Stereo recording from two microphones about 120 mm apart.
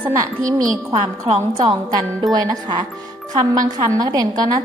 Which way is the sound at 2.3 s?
30° right (ahead or behind).